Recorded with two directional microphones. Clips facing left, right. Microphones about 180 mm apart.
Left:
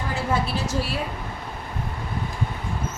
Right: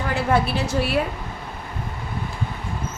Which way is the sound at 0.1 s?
65° right (ahead or behind).